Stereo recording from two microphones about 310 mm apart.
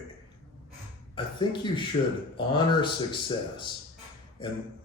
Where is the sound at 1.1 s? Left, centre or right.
Centre.